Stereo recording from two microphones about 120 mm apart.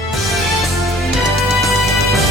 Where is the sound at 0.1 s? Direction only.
Centre (ahead or behind).